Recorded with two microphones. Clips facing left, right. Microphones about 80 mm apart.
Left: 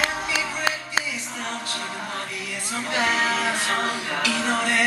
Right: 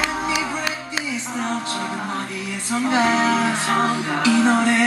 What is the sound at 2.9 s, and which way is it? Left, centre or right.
Music, right.